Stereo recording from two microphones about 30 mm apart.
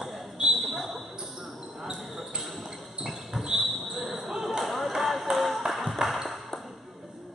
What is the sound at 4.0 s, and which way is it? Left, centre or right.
Basketball bounce, centre.